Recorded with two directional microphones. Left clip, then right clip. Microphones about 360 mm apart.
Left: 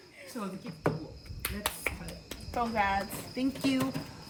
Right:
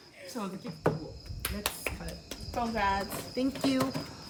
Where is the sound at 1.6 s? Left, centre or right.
Centre.